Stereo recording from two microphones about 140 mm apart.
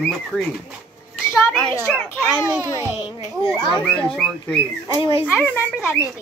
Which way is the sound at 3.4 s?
35° left (ahead or behind).